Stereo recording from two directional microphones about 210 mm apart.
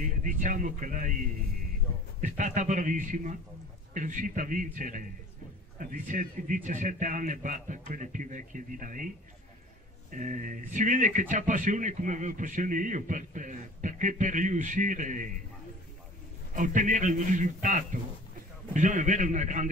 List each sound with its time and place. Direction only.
0.2 s speech: 40° right (ahead or behind)
2.2 s speech: 35° right (ahead or behind)
10.1 s speech: 40° right (ahead or behind)
16.5 s speech: 40° right (ahead or behind)